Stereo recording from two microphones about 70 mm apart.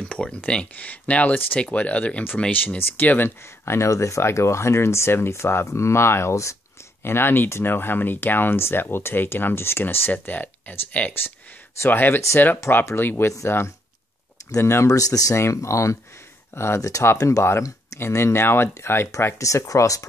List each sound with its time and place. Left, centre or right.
0.1 s speech: centre; by 6.5 s left
7.1 s speech: left
12.5 s speech: left
14.5 s speech: left
14.9 s speech: left
15.3 s speech: left